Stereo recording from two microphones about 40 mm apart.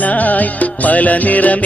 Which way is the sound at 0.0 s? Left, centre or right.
Left.